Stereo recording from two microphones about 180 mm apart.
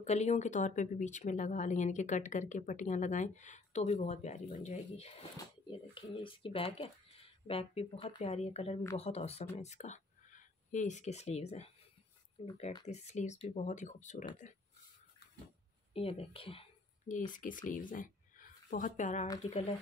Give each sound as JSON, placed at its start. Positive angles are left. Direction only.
{"t": 0.0, "sound": "speech", "side_deg": 40}
{"t": 15.9, "sound": "speech", "side_deg": 30}
{"t": 17.1, "sound": "a woman's voice", "side_deg": 45}